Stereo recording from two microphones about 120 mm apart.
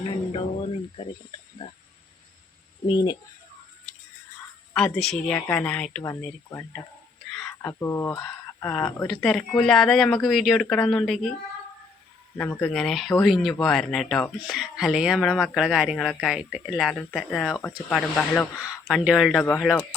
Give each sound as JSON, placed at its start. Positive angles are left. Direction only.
{"t": 0.1, "sound": "music", "side_deg": 45}
{"t": 2.8, "sound": "speech", "side_deg": 40}
{"t": 4.7, "sound": "speech", "side_deg": 5}
{"t": 5.3, "sound": "speech", "side_deg": 15}
{"t": 6.0, "sound": "speech", "side_deg": 25}
{"t": 9.0, "sound": "speech", "side_deg": 5}
{"t": 12.6, "sound": "speech", "side_deg": 5}
{"t": 16.9, "sound": "speech", "side_deg": 10}